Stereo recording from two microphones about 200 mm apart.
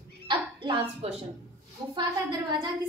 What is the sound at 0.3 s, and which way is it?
Dog, 25° right (ahead or behind).